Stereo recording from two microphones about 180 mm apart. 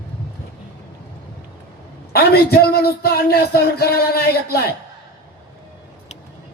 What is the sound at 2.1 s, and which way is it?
Speech, 60° left (ahead or behind).